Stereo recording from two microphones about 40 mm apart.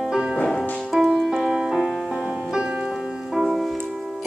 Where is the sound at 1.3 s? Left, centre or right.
Centre.